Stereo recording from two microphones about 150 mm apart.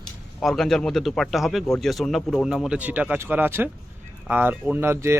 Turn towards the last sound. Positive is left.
turn(degrees=-15)  # may be behind; listen again after turning